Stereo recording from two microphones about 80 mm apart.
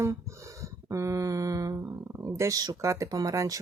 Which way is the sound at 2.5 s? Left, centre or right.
Right.